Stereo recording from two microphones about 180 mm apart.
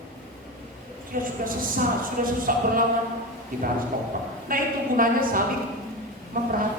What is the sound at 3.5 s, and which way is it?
A woman's voice, 50° right (ahead or behind).